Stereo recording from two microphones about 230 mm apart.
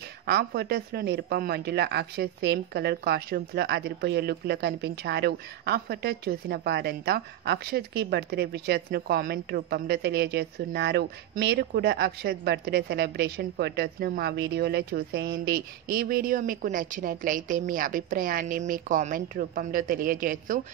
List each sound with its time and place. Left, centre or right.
0.3 s speech: right